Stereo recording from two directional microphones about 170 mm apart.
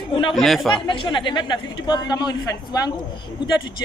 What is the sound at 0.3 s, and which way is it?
Speech, centre (ahead or behind).